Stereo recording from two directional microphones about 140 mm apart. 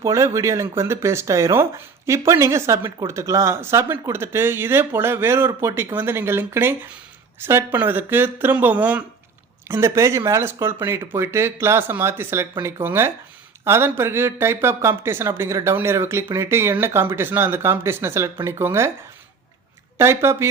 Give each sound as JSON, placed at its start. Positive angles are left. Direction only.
{"t": 0.0, "sound": "speech", "side_deg": -20}
{"t": 20.0, "sound": "speech", "side_deg": -20}